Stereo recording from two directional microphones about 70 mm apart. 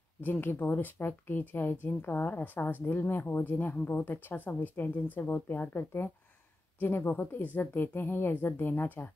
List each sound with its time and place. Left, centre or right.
0.2 s speech: left